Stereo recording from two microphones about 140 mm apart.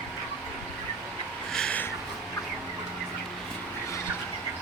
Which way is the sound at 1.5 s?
5° left (ahead or behind).